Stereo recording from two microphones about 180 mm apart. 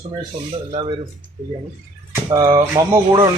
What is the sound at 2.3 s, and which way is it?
Speech, 20° right (ahead or behind).